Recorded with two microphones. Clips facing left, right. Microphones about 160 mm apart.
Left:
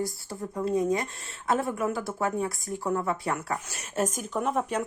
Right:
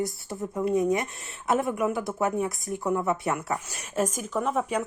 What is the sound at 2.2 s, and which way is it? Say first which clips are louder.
Speech: right 2 dB; 20° right (ahead or behind).